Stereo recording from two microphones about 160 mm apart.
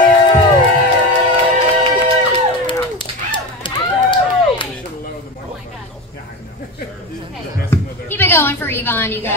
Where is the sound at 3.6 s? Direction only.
30° left (ahead or behind).